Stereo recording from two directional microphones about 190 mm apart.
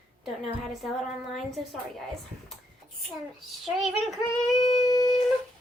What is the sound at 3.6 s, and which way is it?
Speech, centre (ahead or behind).